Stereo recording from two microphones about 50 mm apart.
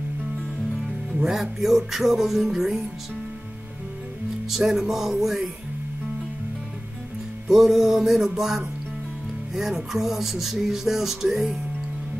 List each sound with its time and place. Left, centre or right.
1.2 s music: centre
4.5 s music: centre
7.4 s music: centre